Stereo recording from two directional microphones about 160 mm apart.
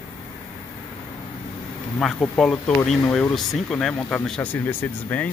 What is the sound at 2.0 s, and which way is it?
Speech, 5° left (ahead or behind).